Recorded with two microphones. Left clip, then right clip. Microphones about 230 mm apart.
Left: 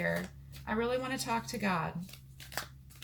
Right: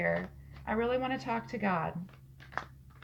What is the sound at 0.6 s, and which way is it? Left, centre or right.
Speech, left.